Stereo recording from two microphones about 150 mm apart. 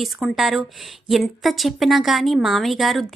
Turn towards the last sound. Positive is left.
turn(degrees=0)  # may be behind; listen again after turning